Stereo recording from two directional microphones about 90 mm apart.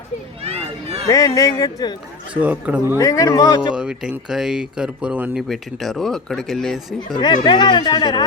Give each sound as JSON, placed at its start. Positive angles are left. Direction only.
{"t": 1.0, "sound": "speech", "side_deg": 40}
{"t": 2.4, "sound": "speech", "side_deg": -15}
{"t": 3.0, "sound": "speech", "side_deg": 35}
{"t": 3.8, "sound": "speech", "side_deg": -10}
{"t": 5.3, "sound": "speech", "side_deg": 0}
{"t": 7.2, "sound": "speech", "side_deg": 55}